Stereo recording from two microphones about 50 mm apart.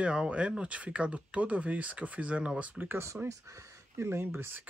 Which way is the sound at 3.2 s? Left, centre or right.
Right.